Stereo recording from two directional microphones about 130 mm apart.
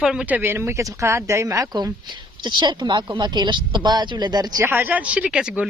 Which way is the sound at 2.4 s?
35° right (ahead or behind).